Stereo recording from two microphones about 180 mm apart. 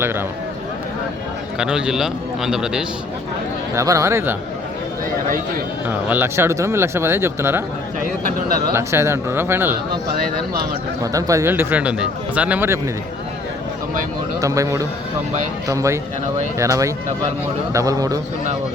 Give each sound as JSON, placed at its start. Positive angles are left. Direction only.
{"t": 0.0, "sound": "a man's voice", "side_deg": -15}
{"t": 1.5, "sound": "a man's voice", "side_deg": -5}
{"t": 3.8, "sound": "a man's voice", "side_deg": -15}
{"t": 5.9, "sound": "a man's voice", "side_deg": -10}
{"t": 8.7, "sound": "a man's voice", "side_deg": -15}
{"t": 10.2, "sound": "speech", "side_deg": -55}
{"t": 11.0, "sound": "a man's voice", "side_deg": -20}
{"t": 14.4, "sound": "a man's voice", "side_deg": -15}